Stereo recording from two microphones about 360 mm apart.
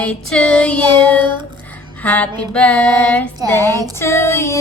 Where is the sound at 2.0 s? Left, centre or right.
Centre.